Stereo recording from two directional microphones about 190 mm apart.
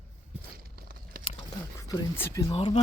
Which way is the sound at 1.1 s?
50° right (ahead or behind).